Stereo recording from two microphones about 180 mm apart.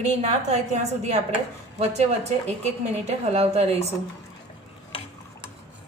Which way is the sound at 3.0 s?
35° right (ahead or behind).